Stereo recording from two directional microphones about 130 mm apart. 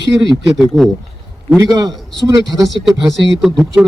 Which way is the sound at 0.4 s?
Centre (ahead or behind).